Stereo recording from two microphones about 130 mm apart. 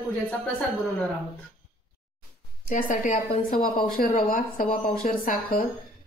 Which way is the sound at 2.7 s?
85° left.